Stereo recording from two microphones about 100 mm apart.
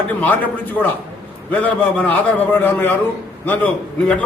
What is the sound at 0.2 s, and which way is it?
A man's voice, 15° left (ahead or behind).